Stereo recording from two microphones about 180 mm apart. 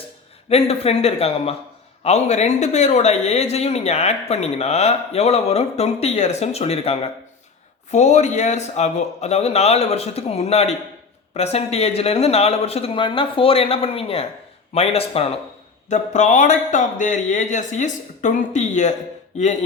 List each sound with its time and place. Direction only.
0.4 s speech: 35° left (ahead or behind)